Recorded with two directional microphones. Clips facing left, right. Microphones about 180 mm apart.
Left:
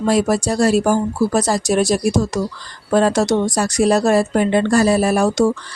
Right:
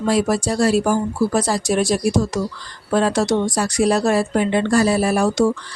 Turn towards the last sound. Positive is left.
turn(degrees=45)  # may be behind; listen again after turning